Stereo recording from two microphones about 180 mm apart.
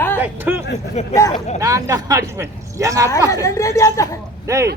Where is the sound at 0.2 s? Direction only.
10° right (ahead or behind).